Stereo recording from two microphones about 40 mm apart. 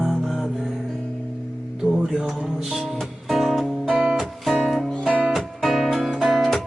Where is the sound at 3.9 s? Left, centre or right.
Centre.